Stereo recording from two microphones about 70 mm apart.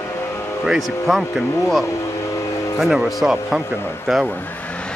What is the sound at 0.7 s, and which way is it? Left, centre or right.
Speech, centre.